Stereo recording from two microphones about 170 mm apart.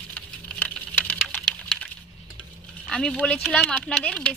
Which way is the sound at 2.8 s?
5° left (ahead or behind).